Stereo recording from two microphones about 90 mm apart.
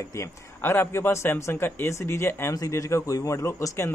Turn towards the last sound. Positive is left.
turn(degrees=35)  # may be behind; listen again after turning